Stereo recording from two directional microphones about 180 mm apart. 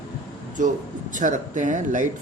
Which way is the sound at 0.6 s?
45° right (ahead or behind).